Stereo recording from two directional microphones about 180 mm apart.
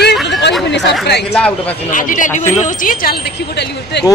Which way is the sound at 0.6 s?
75° left (ahead or behind).